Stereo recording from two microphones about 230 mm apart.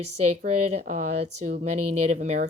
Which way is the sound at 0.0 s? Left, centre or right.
Right.